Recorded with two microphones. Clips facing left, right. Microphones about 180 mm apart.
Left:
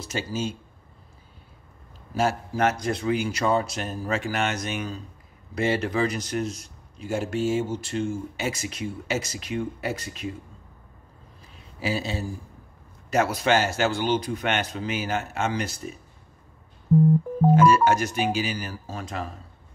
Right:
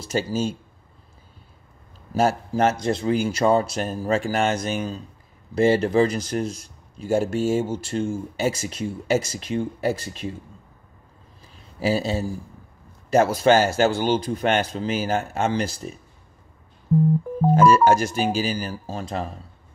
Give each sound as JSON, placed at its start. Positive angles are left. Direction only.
{"t": 0.1, "sound": "a man's voice", "side_deg": -35}
{"t": 2.8, "sound": "a man's voice", "side_deg": -30}
{"t": 11.4, "sound": "a sound", "side_deg": -35}
{"t": 13.1, "sound": "a man's voice", "side_deg": -30}
{"t": 17.6, "sound": "a man's voice", "side_deg": -35}